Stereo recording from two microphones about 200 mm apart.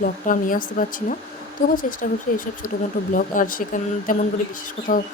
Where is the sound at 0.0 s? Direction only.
45° left (ahead or behind).